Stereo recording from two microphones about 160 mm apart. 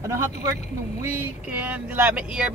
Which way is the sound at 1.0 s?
15° right (ahead or behind).